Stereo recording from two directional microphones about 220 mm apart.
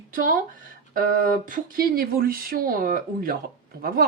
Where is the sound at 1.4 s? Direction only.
40° right (ahead or behind).